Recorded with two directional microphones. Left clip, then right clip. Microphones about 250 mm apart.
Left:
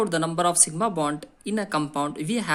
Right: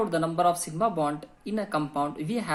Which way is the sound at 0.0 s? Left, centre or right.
Left.